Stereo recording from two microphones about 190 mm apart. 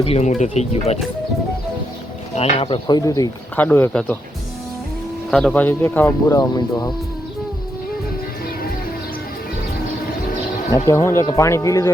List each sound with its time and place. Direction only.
0.0 s speech: 35° left (ahead or behind)
2.3 s speech: 30° left (ahead or behind); by 4.2 s 10° left (ahead or behind)
5.3 s speech: 5° left (ahead or behind); by 6.9 s 20° left (ahead or behind)
10.8 s speech: 15° left (ahead or behind)